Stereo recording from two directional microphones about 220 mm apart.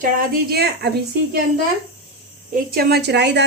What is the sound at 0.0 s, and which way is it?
Speech, 40° right (ahead or behind).